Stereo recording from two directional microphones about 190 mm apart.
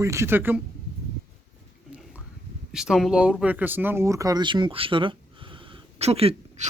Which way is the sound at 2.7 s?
5° right (ahead or behind).